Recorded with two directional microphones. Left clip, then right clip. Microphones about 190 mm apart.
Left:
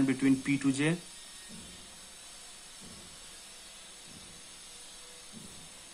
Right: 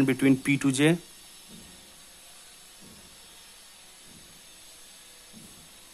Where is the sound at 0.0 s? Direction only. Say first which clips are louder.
Right 5 dB; 60° right (ahead or behind).